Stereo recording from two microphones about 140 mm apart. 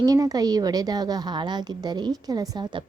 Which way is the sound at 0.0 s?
25° right (ahead or behind).